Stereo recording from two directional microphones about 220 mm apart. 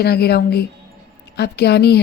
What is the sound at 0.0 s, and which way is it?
A woman's voice, 45° left (ahead or behind).